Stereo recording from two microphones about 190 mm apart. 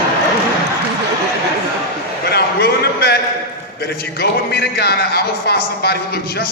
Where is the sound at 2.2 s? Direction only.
55° left (ahead or behind).